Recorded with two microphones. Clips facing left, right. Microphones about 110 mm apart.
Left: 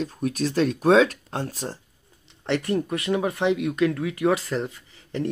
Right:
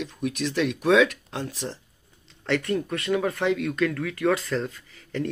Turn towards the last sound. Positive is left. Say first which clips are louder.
# left 1 dB
turn(degrees=25)  # may be behind; listen again after turning